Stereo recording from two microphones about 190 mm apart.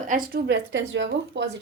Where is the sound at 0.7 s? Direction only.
80° right; by 1.6 s 65° right (ahead or behind).